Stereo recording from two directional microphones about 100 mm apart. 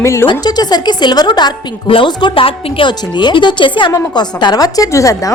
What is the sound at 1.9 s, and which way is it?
A woman's voice, 55° left (ahead or behind).